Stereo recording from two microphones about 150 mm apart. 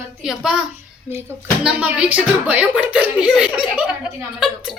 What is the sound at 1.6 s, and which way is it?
Speech, 10° right (ahead or behind).